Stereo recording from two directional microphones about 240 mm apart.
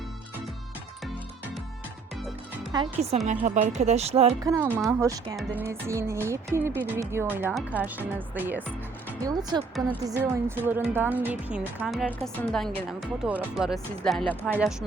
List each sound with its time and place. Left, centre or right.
2.7 s speech: right
4.4 s a woman's voice: centre